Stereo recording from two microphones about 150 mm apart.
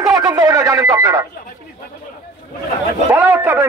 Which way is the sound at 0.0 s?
25° right (ahead or behind).